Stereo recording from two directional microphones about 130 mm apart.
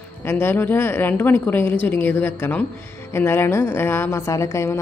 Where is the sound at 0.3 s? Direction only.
20° left (ahead or behind).